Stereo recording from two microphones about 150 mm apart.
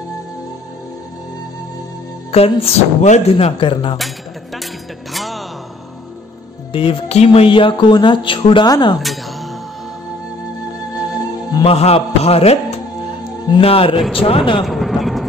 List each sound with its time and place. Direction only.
2.3 s speech: 40° left (ahead or behind)
5.1 s music: centre (ahead or behind)
6.7 s speech: 40° left (ahead or behind)
11.6 s a man's voice: 40° left (ahead or behind)
14.6 s a sound: centre (ahead or behind)